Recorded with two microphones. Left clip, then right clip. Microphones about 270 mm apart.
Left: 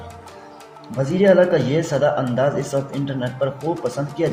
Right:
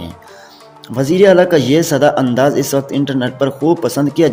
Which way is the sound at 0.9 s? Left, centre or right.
Right.